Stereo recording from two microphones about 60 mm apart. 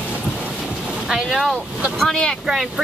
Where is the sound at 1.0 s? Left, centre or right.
Centre.